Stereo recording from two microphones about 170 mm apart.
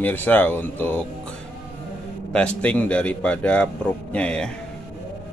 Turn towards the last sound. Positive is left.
turn(degrees=5)  # may be behind; listen again after turning